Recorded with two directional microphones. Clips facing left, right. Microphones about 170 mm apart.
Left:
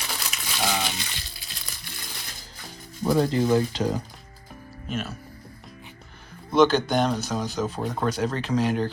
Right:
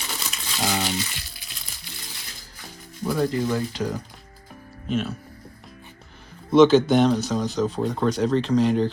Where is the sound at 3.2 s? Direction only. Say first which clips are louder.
Left 2 dB; 30° left (ahead or behind).